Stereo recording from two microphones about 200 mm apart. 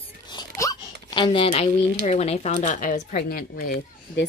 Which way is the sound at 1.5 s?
30° left (ahead or behind).